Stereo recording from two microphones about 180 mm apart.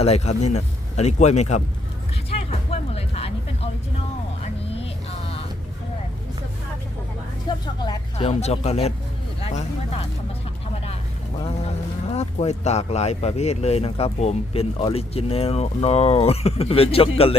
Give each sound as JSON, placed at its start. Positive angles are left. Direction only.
{"t": 0.0, "sound": "speech", "side_deg": 35}
{"t": 2.4, "sound": "music", "side_deg": 35}
{"t": 7.4, "sound": "speech", "side_deg": 25}
{"t": 9.4, "sound": "a sound", "side_deg": 35}
{"t": 12.1, "sound": "speech", "side_deg": 35}